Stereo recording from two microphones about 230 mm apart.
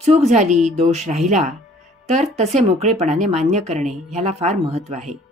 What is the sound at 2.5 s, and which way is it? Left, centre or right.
A woman's voice, right.